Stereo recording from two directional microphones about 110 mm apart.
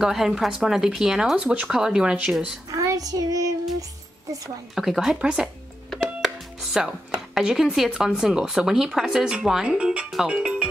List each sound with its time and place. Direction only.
0.0 s speech: 5° right (ahead or behind)
2.7 s child singing: 30° right (ahead or behind)
4.7 s speech: centre (ahead or behind)